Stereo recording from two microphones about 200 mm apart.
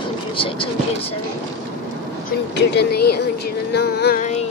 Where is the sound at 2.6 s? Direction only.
55° left (ahead or behind).